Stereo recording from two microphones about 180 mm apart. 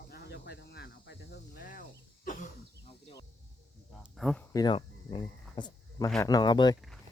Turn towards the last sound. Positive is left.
turn(degrees=25)  # may be behind; listen again after turning